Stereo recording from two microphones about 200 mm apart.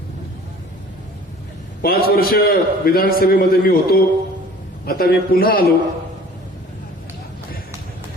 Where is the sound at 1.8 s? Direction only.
50° left (ahead or behind).